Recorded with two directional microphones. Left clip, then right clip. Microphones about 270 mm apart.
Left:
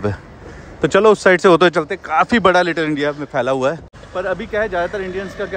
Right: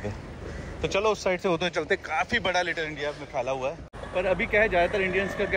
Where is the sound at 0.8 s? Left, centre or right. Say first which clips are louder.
Left 13 dB; left.